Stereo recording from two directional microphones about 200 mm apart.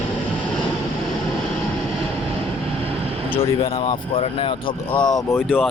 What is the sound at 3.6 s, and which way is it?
Speech, 20° left (ahead or behind).